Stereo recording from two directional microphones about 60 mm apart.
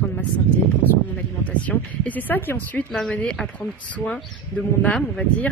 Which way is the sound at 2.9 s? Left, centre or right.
Centre.